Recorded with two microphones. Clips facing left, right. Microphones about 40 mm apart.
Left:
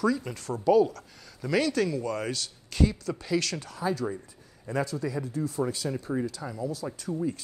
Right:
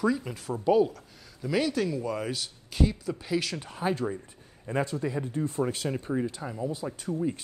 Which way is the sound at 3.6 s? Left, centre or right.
Right.